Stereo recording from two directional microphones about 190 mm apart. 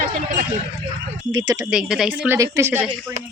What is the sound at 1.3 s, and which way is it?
Speech, 20° right (ahead or behind).